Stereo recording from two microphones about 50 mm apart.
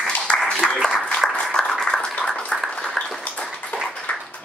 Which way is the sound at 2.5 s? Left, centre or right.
Centre.